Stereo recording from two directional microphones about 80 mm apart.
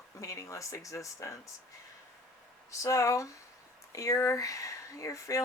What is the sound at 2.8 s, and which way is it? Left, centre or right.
Speech, left.